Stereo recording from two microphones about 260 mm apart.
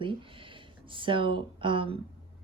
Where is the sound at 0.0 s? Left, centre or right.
Centre.